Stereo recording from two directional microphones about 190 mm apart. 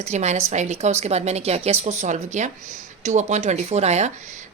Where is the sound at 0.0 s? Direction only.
35° right (ahead or behind).